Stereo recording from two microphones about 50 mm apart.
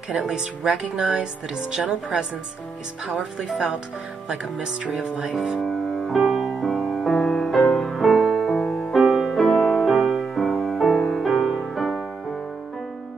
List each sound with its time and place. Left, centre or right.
0.3 s speech: centre
6.3 s music: centre